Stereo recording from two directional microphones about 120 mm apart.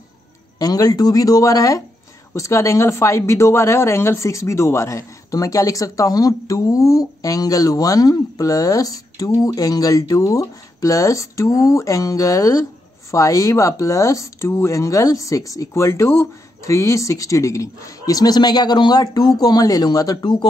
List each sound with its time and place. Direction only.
0.6 s speech: 30° left (ahead or behind)